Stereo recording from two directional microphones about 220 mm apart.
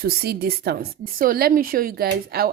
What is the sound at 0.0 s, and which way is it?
A woman's voice, 45° right (ahead or behind).